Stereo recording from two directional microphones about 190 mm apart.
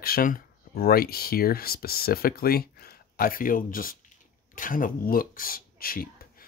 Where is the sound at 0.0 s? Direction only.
50° left (ahead or behind).